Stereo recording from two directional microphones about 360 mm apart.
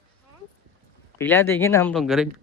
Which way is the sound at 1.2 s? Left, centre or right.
Centre.